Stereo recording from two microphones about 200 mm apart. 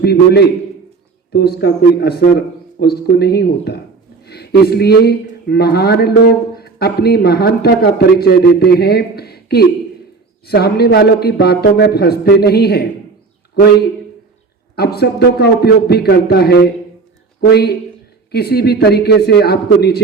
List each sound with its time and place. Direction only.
0.0 s a man's voice: 55° left (ahead or behind)
14.8 s a man's voice: 50° left (ahead or behind)